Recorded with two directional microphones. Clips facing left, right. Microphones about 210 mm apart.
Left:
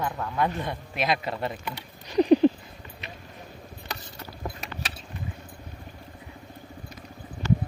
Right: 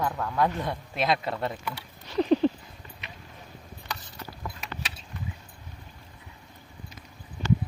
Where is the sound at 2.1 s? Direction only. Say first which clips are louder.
Left 4 dB; 15° left (ahead or behind).